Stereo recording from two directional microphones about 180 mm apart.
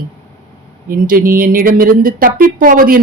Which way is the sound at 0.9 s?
50° right (ahead or behind).